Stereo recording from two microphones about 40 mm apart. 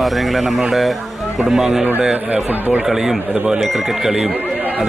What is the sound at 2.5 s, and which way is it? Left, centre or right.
Speech, right.